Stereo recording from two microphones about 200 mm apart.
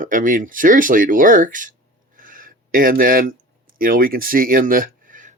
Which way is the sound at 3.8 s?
45° right (ahead or behind).